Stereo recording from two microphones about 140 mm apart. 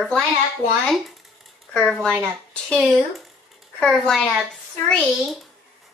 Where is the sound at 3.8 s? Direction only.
5° left (ahead or behind).